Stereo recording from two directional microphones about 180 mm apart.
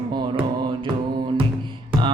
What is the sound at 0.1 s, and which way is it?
Music, 25° right (ahead or behind).